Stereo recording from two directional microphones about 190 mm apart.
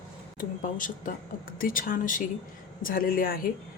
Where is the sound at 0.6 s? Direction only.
45° left (ahead or behind).